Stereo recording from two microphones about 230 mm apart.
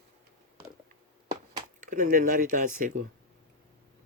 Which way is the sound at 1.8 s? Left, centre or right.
Right.